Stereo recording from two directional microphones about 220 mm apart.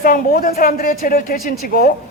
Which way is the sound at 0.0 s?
40° left (ahead or behind).